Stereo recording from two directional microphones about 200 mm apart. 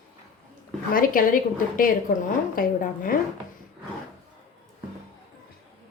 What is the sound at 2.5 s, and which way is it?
Speech, 45° left (ahead or behind).